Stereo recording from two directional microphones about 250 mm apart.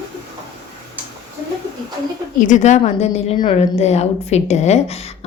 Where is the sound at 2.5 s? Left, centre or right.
Left.